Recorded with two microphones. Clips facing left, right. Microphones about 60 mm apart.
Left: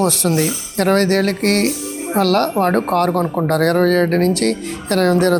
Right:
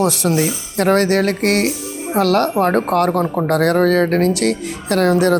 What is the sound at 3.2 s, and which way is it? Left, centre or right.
Speech, centre.